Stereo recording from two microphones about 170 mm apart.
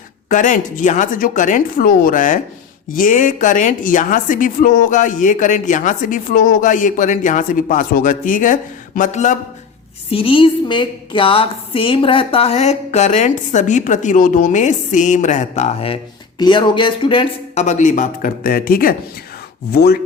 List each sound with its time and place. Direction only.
0.3 s a woman's voice: 50° left (ahead or behind)
10.1 s a woman's voice: 35° left (ahead or behind)
16.4 s a woman's voice: 25° left (ahead or behind); by 18.9 s 60° left (ahead or behind)
19.7 s chopping: 65° left (ahead or behind)